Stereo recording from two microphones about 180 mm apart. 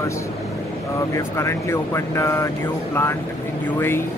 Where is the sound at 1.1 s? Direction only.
15° left (ahead or behind).